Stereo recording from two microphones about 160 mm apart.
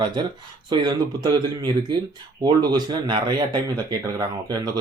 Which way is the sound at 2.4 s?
25° right (ahead or behind).